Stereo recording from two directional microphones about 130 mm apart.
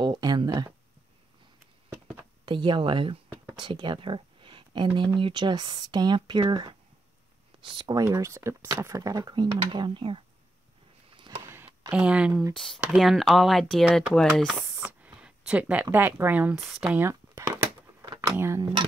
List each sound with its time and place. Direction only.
0.0 s speech: 35° right (ahead or behind)
2.4 s speech: 40° right (ahead or behind)
8.0 s speech: 25° right (ahead or behind); by 10.2 s 40° right (ahead or behind)
11.1 s a sound: 40° right (ahead or behind)
11.4 s a sound: 15° right (ahead or behind)
11.9 s speech: 10° right (ahead or behind)
12.5 s speech: centre (ahead or behind)
15.0 s speech: 10° right (ahead or behind)
17.0 s speech: 20° right (ahead or behind)
18.0 s a sound: 30° right (ahead or behind)
18.3 s speech: 20° right (ahead or behind)
18.6 s speech: 35° right (ahead or behind)